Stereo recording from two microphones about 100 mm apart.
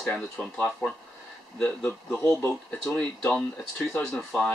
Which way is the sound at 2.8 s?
5° left (ahead or behind).